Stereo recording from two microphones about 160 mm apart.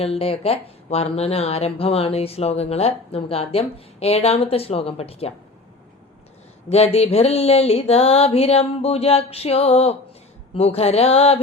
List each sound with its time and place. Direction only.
0.0 s speech: 40° left (ahead or behind)
6.7 s speech: 40° left (ahead or behind)